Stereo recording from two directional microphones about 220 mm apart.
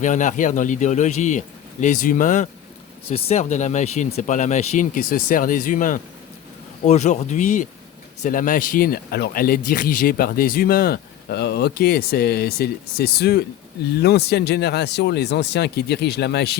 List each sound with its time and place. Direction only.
0.0 s speech: 35° left (ahead or behind)